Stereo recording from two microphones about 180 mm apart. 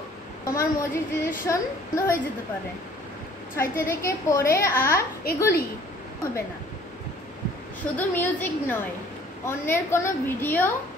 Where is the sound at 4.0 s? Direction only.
15° left (ahead or behind).